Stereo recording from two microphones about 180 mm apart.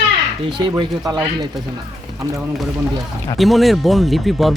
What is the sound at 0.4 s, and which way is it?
Speech, 25° right (ahead or behind).